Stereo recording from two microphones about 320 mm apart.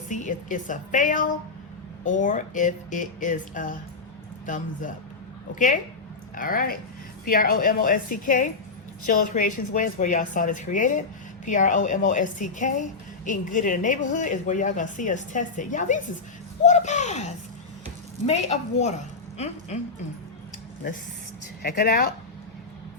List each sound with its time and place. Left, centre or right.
0.1 s speech: left
21.6 s speech: left